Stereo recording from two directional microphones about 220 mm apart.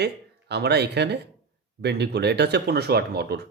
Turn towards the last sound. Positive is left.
turn(degrees=-45)  # may be behind; listen again after turning